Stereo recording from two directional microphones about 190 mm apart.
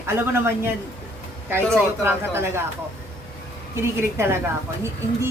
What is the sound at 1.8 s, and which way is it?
Speech, 10° right (ahead or behind).